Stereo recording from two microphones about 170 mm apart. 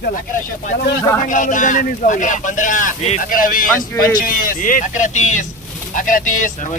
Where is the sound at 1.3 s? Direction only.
50° left (ahead or behind).